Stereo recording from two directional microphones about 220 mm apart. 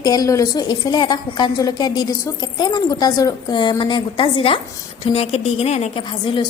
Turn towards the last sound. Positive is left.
turn(degrees=20)  # may be behind; listen again after turning